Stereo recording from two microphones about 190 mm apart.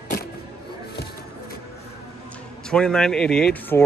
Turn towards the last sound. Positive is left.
turn(degrees=10)  # may be behind; listen again after turning